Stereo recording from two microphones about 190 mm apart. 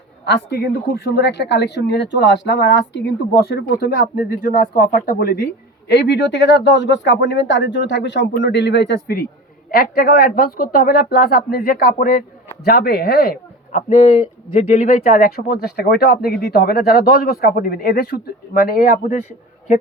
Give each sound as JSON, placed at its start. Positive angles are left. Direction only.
{"t": 0.5, "sound": "speech", "side_deg": 55}
{"t": 5.9, "sound": "speech", "side_deg": 65}
{"t": 14.0, "sound": "speech", "side_deg": 30}